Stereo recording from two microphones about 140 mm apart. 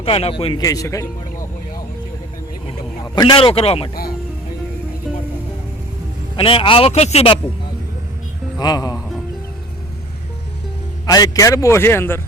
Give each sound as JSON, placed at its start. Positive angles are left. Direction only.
{"t": 0.0, "sound": "speech", "side_deg": 40}
{"t": 0.6, "sound": "a man's voice", "side_deg": 25}
{"t": 3.2, "sound": "speech", "side_deg": 35}
{"t": 6.3, "sound": "speech", "side_deg": 40}
{"t": 8.5, "sound": "speech", "side_deg": 30}
{"t": 11.0, "sound": "a man's voice", "side_deg": 25}